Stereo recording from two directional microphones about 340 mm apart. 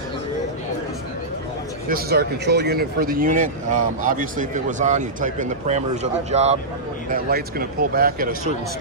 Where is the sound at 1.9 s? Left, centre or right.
Right.